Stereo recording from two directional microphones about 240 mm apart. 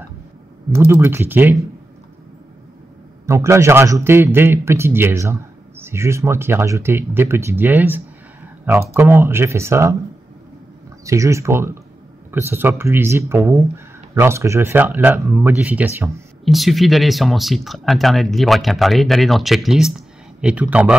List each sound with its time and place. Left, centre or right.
0.7 s a man's voice: centre
3.3 s a man's voice: centre
11.1 s a man's voice: centre